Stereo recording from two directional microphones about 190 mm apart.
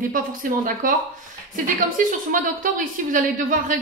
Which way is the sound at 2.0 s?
45° right (ahead or behind).